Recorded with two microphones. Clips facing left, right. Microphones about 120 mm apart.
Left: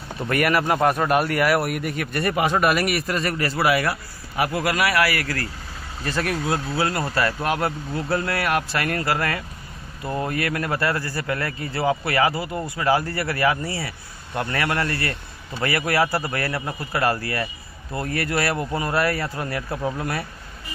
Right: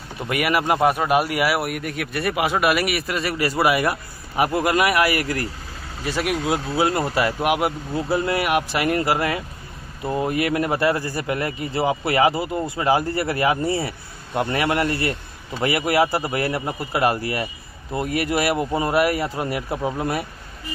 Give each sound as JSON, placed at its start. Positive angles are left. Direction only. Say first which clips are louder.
{"t": 0.2, "sound": "a man's voice", "louder": "left 1 dB", "side_deg": -10}